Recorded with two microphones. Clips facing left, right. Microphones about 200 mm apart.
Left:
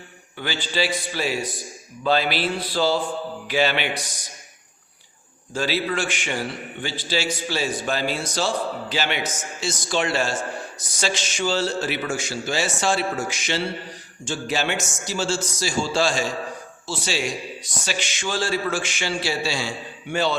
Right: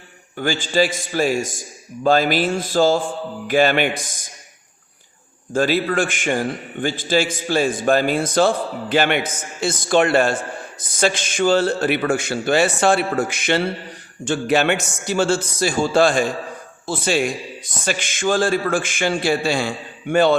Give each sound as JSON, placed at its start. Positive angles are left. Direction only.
{"t": 0.3, "sound": "a man's voice", "side_deg": -45}
{"t": 5.5, "sound": "a man's voice", "side_deg": -50}